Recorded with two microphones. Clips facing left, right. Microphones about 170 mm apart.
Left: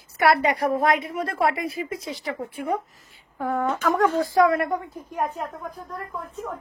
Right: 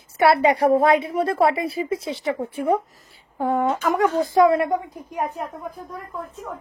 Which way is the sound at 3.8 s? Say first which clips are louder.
Right 1 dB; 15° right (ahead or behind).